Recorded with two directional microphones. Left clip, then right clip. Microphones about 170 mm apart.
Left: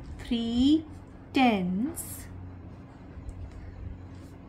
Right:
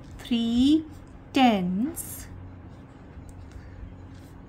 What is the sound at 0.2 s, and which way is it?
A woman's voice, 30° right (ahead or behind).